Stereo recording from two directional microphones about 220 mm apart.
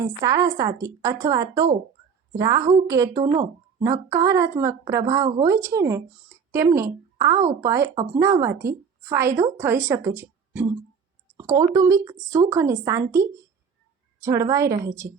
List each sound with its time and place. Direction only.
0.0 s a woman's voice: 15° right (ahead or behind)